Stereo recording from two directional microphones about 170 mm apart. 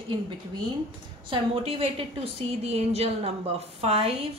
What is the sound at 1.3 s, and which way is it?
A woman's voice, 35° right (ahead or behind).